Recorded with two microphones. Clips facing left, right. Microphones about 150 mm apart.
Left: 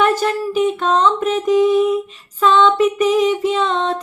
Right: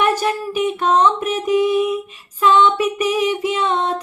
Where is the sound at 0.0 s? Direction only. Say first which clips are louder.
Left 2 dB; 10° right (ahead or behind).